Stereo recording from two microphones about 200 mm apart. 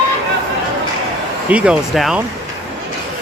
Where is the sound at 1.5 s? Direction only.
5° right (ahead or behind).